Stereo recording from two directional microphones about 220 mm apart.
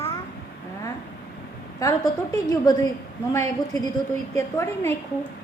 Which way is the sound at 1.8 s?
15° left (ahead or behind).